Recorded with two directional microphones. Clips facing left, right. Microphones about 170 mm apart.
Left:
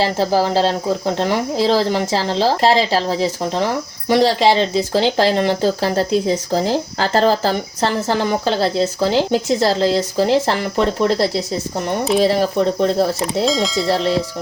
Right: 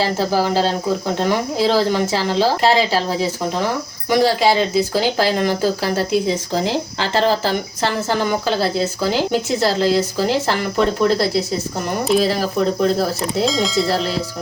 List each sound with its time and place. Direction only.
0.0 s speech: 30° left (ahead or behind)
13.4 s speech: centre (ahead or behind)